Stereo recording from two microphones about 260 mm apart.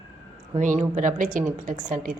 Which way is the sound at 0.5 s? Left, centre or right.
Right.